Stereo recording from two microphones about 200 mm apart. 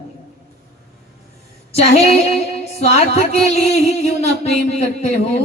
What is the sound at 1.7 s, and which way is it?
Speech, 30° left (ahead or behind).